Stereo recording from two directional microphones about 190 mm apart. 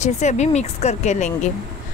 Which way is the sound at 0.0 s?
40° left (ahead or behind).